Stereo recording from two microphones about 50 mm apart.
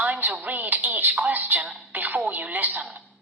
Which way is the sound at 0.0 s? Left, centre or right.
Right.